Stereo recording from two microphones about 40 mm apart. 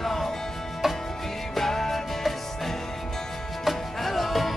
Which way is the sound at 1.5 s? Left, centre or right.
Centre.